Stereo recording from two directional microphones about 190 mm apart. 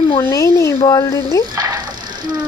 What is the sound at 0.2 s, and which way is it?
Speech, 15° left (ahead or behind).